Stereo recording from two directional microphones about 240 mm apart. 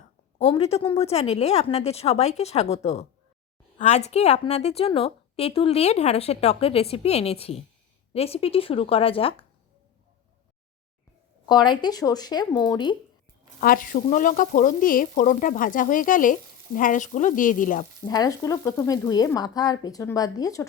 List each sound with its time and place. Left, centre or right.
0.3 s a woman's voice: left
11.4 s speech: centre
13.6 s speech: left
18.0 s speech: centre